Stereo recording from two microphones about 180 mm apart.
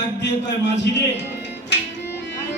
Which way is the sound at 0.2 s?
75° left (ahead or behind).